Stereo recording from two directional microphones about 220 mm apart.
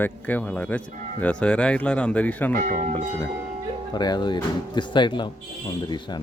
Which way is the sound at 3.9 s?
20° left (ahead or behind).